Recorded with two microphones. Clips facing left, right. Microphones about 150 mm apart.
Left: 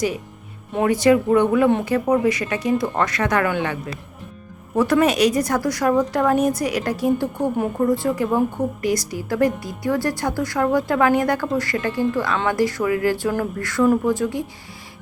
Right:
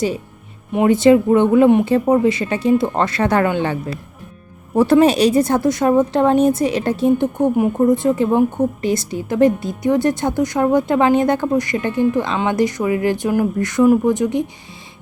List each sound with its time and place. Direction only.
0.7 s speech: 20° right (ahead or behind)